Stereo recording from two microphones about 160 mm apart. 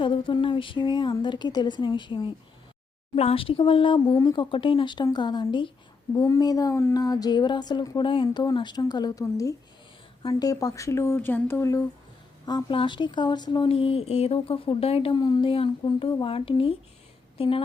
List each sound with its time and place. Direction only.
0.0 s a woman's voice: 30° left (ahead or behind)